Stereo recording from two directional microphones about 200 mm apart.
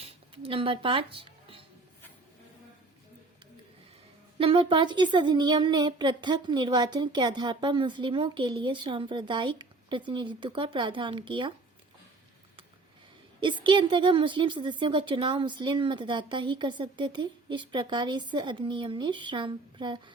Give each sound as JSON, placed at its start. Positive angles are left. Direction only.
{"t": 0.0, "sound": "a sound", "side_deg": -25}
{"t": 4.4, "sound": "speech", "side_deg": -25}
{"t": 13.7, "sound": "speech", "side_deg": -25}